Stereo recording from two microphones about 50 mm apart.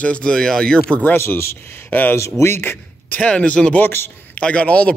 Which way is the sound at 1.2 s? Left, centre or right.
Left.